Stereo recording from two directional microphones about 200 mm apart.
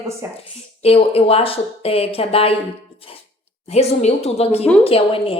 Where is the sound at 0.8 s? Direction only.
30° left (ahead or behind).